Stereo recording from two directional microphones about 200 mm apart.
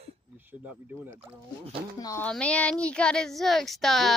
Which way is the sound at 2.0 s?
15° left (ahead or behind).